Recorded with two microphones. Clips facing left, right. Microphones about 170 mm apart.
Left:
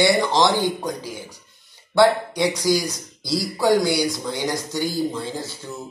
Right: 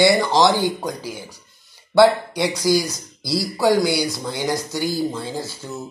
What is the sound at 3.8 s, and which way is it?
A man's voice, 15° right (ahead or behind).